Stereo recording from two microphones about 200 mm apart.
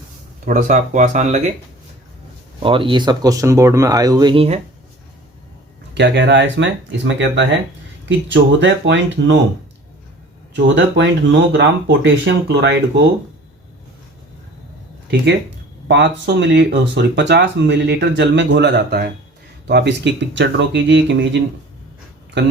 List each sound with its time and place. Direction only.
0.4 s speech: 40° right (ahead or behind)
2.6 s speech: 25° right (ahead or behind)
5.9 s speech: 60° right (ahead or behind)
10.5 s speech: 65° right (ahead or behind)
15.0 s speech: 60° right (ahead or behind)